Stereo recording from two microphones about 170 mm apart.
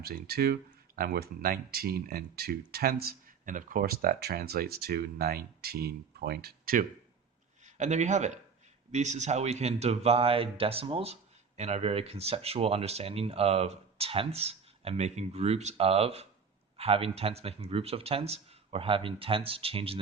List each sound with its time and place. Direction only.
0.0 s speech: 60° right (ahead or behind)
7.6 s a man's voice: 45° right (ahead or behind)